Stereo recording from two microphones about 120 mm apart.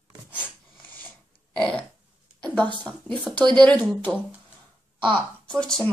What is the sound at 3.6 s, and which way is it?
Speech, 10° left (ahead or behind).